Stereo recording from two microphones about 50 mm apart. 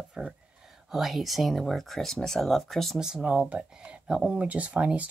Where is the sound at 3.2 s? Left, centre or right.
Right.